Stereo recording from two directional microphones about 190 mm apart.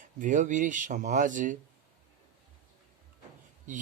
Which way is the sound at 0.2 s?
40° right (ahead or behind).